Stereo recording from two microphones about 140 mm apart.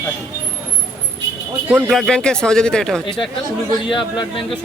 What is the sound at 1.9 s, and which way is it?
Speech, 5° left (ahead or behind).